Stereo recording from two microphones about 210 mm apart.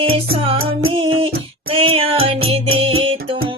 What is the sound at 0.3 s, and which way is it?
Music, 25° right (ahead or behind).